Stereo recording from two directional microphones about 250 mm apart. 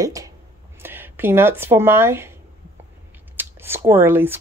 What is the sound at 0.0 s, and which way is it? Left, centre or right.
Speech, centre.